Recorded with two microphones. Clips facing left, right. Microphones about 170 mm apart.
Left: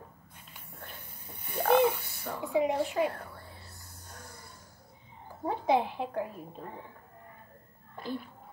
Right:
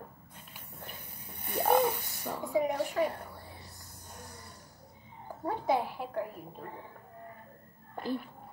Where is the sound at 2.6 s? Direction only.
20° left (ahead or behind).